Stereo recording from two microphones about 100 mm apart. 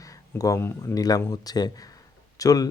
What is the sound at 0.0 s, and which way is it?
Speech, 35° left (ahead or behind).